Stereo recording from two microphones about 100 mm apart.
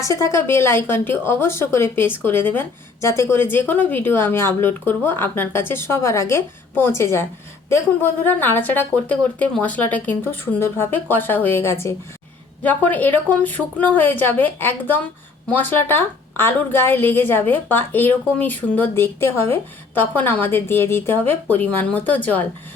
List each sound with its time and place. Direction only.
0.0 s speech: 30° left (ahead or behind)
12.6 s speech: 15° left (ahead or behind)